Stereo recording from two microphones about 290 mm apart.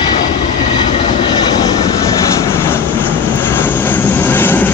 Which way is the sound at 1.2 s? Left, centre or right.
Centre.